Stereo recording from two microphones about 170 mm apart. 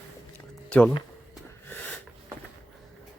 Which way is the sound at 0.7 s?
10° left (ahead or behind).